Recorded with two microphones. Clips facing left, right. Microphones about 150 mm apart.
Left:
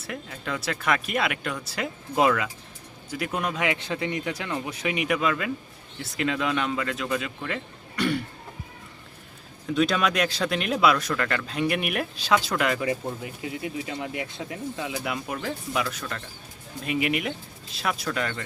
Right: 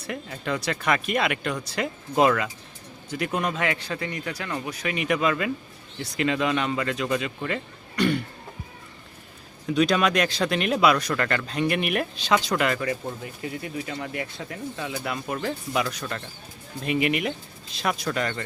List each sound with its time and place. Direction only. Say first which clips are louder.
0.0 s speech: right 3 dB; centre (ahead or behind)
3.6 s speech: left 1 dB; 20° left (ahead or behind)
5.0 s speech: right 3 dB; 5° left (ahead or behind)
9.6 s speech: right 2 dB; centre (ahead or behind)
12.8 s speech: left 1 dB; 15° left (ahead or behind); by 18.4 s centre (ahead or behind)